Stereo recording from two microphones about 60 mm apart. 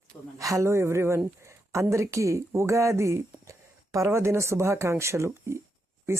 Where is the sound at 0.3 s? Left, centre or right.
Right.